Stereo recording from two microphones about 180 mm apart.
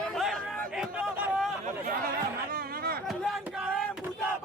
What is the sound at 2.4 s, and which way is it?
Speech, 55° right (ahead or behind).